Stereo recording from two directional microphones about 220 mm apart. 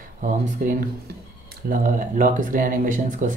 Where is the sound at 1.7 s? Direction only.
35° right (ahead or behind).